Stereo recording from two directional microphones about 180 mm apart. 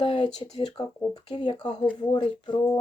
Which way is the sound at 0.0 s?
30° left (ahead or behind).